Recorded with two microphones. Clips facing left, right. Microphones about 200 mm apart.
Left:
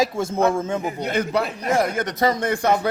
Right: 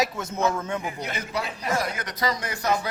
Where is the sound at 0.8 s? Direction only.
55° left (ahead or behind).